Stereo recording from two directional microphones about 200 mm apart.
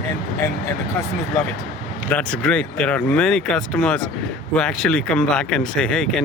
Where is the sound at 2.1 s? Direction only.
5° left (ahead or behind).